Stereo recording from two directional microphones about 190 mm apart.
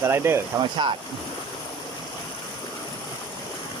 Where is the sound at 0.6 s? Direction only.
25° right (ahead or behind).